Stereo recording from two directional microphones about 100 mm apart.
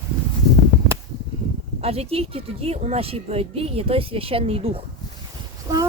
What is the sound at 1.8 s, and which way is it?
A woman's voice, 90° right.